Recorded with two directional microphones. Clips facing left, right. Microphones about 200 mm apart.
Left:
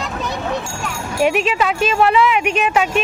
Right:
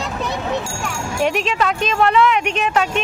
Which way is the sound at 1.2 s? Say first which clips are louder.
Left 3 dB; 5° left (ahead or behind).